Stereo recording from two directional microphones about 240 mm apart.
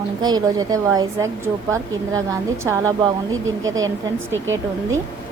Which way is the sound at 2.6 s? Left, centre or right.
Centre.